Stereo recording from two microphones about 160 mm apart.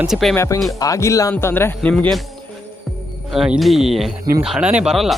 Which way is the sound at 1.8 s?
5° left (ahead or behind).